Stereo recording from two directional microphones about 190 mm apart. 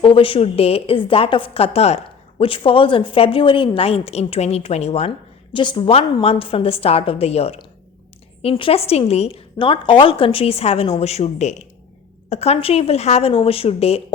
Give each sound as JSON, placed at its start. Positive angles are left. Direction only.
{"t": 0.0, "sound": "a woman's voice", "side_deg": 30}